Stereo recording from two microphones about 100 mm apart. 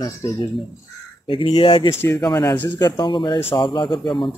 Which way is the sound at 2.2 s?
45° left (ahead or behind).